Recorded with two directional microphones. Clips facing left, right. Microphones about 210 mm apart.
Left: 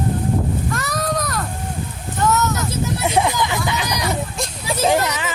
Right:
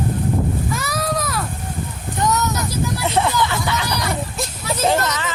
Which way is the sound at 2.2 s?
15° right (ahead or behind).